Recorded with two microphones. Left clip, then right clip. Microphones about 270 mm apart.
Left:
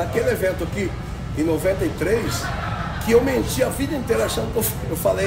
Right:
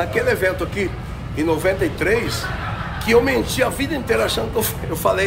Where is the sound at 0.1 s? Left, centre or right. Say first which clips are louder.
Right 1 dB; centre.